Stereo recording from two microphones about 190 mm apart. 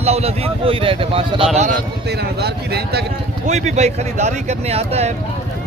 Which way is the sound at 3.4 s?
35° right (ahead or behind).